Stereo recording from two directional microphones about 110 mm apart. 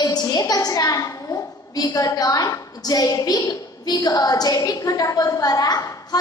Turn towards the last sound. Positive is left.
turn(degrees=30)  # may be behind; listen again after turning